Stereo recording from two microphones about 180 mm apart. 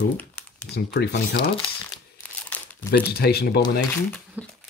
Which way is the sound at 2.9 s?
60° left (ahead or behind).